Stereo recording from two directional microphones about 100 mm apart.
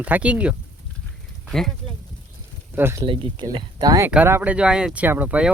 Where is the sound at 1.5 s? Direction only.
5° left (ahead or behind).